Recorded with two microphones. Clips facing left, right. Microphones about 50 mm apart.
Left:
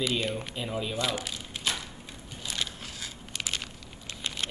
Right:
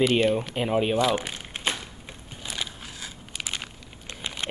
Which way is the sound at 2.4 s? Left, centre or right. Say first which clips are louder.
Right 1 dB; centre.